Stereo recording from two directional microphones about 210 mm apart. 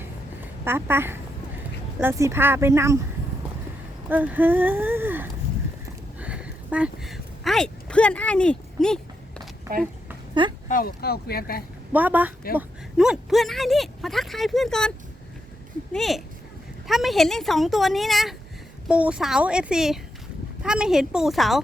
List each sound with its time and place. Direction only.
0.6 s speech: 10° right (ahead or behind)
4.1 s speech: 10° right (ahead or behind)
6.1 s a sound: 5° right (ahead or behind)
10.7 s speech: 45° left (ahead or behind)
11.9 s speech: 10° right (ahead or behind)